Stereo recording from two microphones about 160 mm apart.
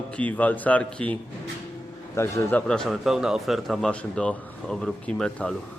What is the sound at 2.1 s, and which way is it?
Speech, 15° left (ahead or behind).